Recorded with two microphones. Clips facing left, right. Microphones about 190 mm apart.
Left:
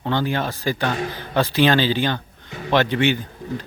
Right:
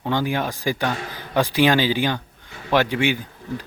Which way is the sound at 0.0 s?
10° right (ahead or behind).